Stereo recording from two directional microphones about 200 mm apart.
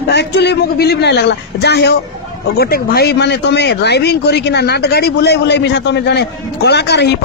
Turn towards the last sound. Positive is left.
turn(degrees=55)  # may be behind; listen again after turning